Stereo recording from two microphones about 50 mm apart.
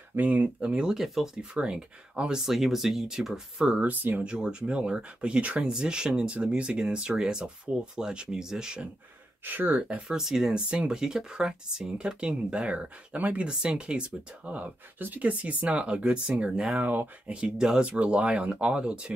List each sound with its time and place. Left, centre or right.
0.1 s speech: right
0.6 s speech: right
0.9 s speech: centre
1.5 s speech: centre
3.9 s speech: right
4.2 s speech: centre
9.5 s speech: right
9.8 s speech: right
10.0 s speech: centre; by 13.5 s right
13.5 s speech: centre
16.7 s speech: right
17.3 s speech: centre